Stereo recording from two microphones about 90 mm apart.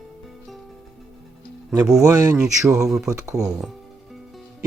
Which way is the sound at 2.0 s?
40° right (ahead or behind).